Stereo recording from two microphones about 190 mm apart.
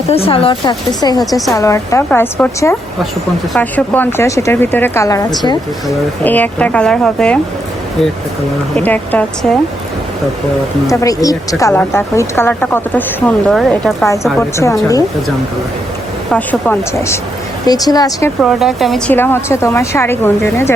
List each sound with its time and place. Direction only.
0.1 s speech: 30° left (ahead or behind)
6.2 s speech: 10° left (ahead or behind)
8.7 s speech: 10° left (ahead or behind)
10.8 s speech: 15° left (ahead or behind); by 14.1 s centre (ahead or behind)
14.3 s speech: 15° left (ahead or behind)
16.3 s speech: 10° left (ahead or behind)
18.4 s speech: centre (ahead or behind)